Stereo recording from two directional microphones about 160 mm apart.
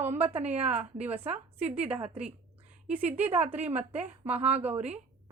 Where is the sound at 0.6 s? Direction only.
10° right (ahead or behind).